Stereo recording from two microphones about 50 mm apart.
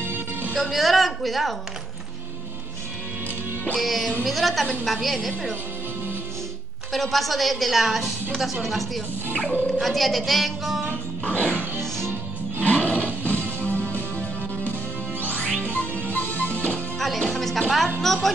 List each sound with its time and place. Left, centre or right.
0.0 s music: right
0.6 s a woman's voice: centre
3.8 s a woman's voice: centre
6.9 s a woman's voice: centre
9.3 s speech: left
9.7 s speech: centre
11.2 s music: left
12.6 s a sound: left
13.6 s music: left
17.4 s music: centre
18.0 s a woman's voice: centre